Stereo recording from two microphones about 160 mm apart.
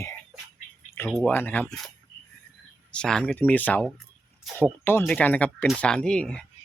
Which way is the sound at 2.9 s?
5° left (ahead or behind).